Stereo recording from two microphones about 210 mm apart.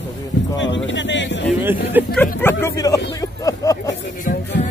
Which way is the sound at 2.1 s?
10° left (ahead or behind).